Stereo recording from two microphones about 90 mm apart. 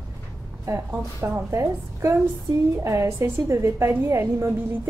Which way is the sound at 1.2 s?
35° right (ahead or behind).